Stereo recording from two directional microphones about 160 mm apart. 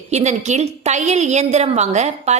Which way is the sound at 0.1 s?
45° right (ahead or behind).